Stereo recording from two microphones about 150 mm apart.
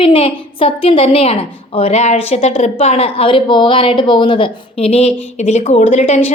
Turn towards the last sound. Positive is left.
turn(degrees=45)  # may be behind; listen again after turning